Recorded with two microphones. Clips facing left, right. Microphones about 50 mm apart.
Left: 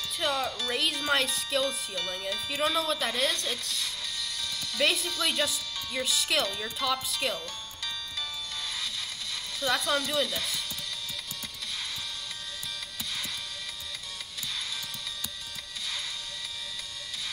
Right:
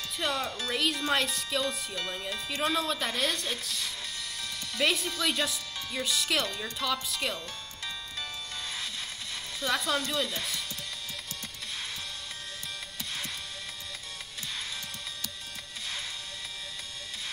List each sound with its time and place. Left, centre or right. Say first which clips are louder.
0.2 s speech: left 2 dB; centre
2.0 s speech: left 1 dB; centre
2.3 s speech: left 1 dB; centre
9.7 s speech: left 1 dB; centre